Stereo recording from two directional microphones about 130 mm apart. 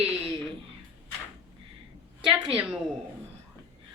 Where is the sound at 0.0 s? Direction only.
45° right (ahead or behind).